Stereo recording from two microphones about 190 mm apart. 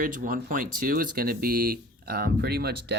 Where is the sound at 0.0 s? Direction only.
45° right (ahead or behind).